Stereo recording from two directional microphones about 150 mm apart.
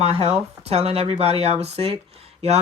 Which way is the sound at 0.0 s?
45° right (ahead or behind).